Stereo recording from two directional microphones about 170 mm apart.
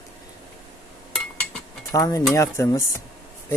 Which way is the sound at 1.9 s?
20° left (ahead or behind).